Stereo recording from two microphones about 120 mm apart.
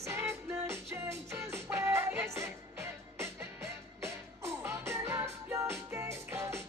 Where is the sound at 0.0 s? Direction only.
20° right (ahead or behind).